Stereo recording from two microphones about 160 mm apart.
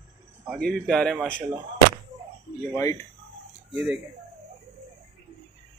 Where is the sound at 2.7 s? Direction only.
20° left (ahead or behind).